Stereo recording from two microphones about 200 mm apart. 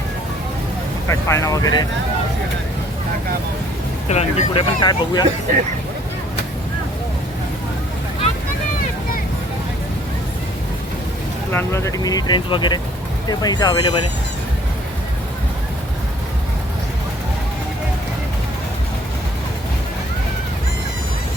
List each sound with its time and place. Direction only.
1.0 s speech: 15° left (ahead or behind)
4.1 s speech: 35° left (ahead or behind)
4.8 s speech: 20° left (ahead or behind)
11.5 s speech: 15° left (ahead or behind)